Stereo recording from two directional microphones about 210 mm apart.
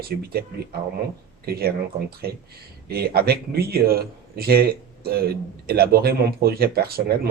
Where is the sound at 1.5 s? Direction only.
45° right (ahead or behind).